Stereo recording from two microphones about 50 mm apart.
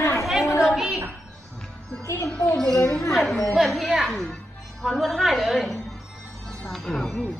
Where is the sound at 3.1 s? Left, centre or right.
Centre.